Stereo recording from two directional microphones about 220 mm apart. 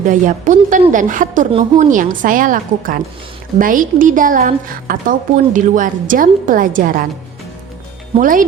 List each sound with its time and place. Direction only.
0.0 s a woman's voice: 35° right (ahead or behind)
8.1 s a woman's voice: 35° right (ahead or behind)